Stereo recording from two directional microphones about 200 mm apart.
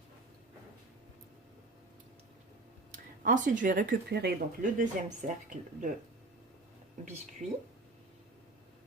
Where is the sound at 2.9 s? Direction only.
40° right (ahead or behind).